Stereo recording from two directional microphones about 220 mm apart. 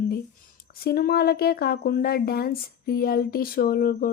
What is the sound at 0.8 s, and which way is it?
A woman's voice, 45° left (ahead or behind).